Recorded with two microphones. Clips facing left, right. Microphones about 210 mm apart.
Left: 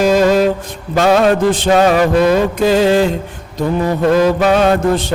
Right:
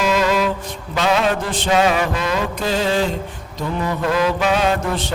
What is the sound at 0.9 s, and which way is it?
Music, 45° left (ahead or behind).